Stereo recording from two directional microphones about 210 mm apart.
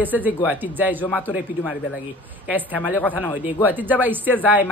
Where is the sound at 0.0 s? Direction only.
10° right (ahead or behind).